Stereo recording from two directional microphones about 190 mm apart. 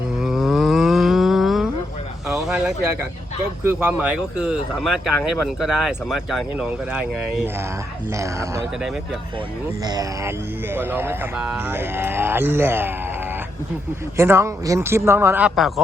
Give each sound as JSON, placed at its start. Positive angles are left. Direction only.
{"t": 0.2, "sound": "a sound", "side_deg": 0}
{"t": 3.6, "sound": "speech", "side_deg": -10}
{"t": 9.8, "sound": "speech", "side_deg": -20}
{"t": 14.2, "sound": "speech", "side_deg": -15}